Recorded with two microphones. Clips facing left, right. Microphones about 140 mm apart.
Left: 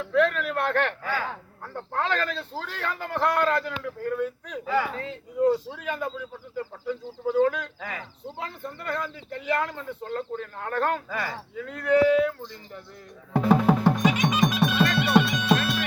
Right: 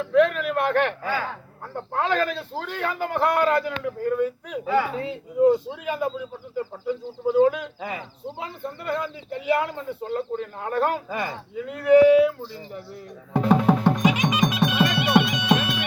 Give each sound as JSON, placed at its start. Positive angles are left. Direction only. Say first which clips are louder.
{"t": 0.0, "sound": "a sound", "louder": "right 4 dB", "side_deg": -5}
{"t": 1.7, "sound": "speech", "louder": "right 3 dB", "side_deg": -10}
{"t": 13.3, "sound": "music", "louder": "right 1 dB", "side_deg": 0}
{"t": 14.0, "sound": "music", "louder": "right 1 dB", "side_deg": -10}